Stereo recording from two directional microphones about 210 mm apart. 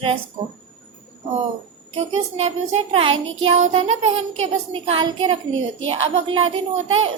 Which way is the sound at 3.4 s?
70° right (ahead or behind).